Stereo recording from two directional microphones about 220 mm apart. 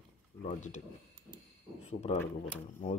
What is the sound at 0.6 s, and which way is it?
Speech, 35° left (ahead or behind).